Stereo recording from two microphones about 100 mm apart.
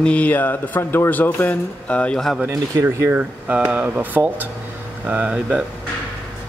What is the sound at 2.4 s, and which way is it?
Speech, 30° right (ahead or behind).